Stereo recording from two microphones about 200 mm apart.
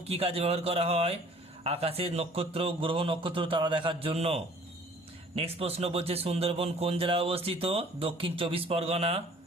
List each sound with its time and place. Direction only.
0.0 s speech: 30° right (ahead or behind)